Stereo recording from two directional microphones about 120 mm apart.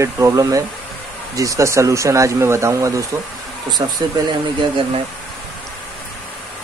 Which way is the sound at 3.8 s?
45° right (ahead or behind).